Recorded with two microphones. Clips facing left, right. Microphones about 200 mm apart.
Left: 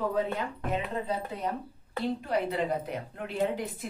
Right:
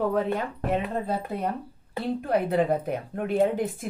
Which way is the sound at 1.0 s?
60° right (ahead or behind).